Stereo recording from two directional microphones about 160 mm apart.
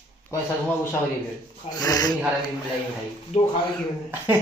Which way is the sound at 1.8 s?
25° left (ahead or behind).